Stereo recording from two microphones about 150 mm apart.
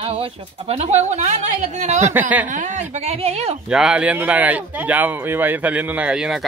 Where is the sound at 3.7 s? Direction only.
5° right (ahead or behind).